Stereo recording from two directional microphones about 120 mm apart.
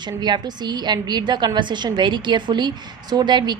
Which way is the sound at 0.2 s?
35° right (ahead or behind).